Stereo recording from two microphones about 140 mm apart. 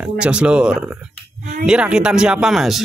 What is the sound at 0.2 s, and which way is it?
Speech, 5° right (ahead or behind).